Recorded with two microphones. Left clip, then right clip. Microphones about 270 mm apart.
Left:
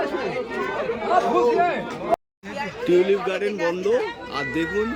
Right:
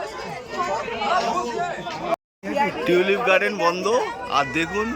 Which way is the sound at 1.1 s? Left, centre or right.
Left.